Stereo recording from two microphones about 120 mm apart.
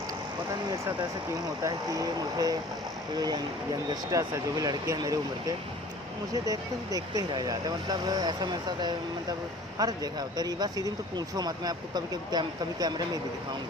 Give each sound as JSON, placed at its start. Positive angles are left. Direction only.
{"t": 1.6, "sound": "speech", "side_deg": -30}